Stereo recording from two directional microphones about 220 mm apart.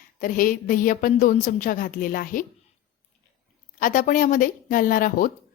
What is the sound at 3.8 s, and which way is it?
A woman's voice, 40° left (ahead or behind).